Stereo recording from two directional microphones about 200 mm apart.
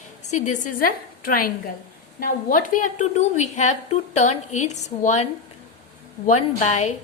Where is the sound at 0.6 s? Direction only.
45° left (ahead or behind).